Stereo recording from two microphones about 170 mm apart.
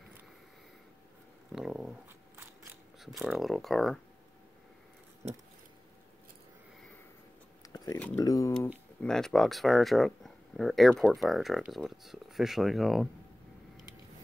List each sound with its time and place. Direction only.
1.5 s speech: 5° right (ahead or behind)
7.6 s a sound: 20° left (ahead or behind)
8.2 s speech: 20° left (ahead or behind)
8.5 s speech: 5° left (ahead or behind)